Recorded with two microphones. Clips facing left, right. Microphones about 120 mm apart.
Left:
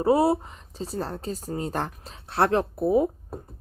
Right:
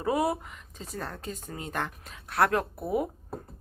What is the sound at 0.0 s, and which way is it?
Speech, 30° left (ahead or behind).